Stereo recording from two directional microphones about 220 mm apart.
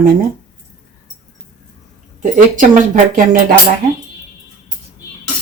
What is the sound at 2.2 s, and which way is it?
Speech, 35° right (ahead or behind).